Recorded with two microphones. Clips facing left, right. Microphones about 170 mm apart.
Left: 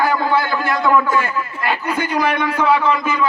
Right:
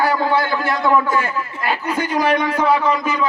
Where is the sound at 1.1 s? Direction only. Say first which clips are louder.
Left 1 dB; 30° right (ahead or behind).